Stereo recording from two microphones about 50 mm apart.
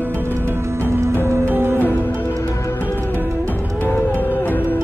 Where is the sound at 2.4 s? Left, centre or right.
Left.